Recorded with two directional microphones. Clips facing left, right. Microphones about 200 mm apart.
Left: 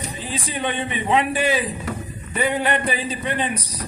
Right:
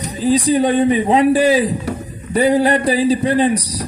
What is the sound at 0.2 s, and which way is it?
A man's voice, 40° right (ahead or behind).